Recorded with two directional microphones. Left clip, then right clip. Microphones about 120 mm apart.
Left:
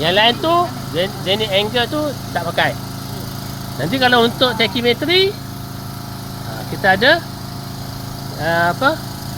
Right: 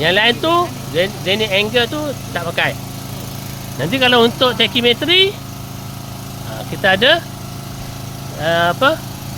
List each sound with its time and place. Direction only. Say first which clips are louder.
0.0 s speech: even; 40° right (ahead or behind)
3.8 s speech: right 1 dB; 30° right (ahead or behind); by 5.3 s 45° right (ahead or behind)
6.8 s speech: even; 40° right (ahead or behind)
8.4 s speech: right 2 dB; 30° right (ahead or behind)